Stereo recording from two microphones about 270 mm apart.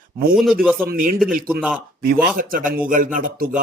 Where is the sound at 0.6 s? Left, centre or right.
Centre.